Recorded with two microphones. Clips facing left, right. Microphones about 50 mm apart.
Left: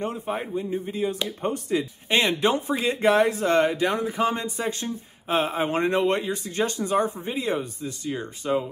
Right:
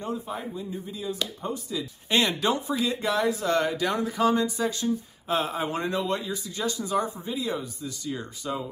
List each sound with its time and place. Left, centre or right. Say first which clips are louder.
0.0 s speech: left 4 dB; left
2.0 s speech: left 2 dB; left